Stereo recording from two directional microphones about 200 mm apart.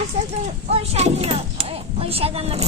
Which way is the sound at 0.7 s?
30° right (ahead or behind).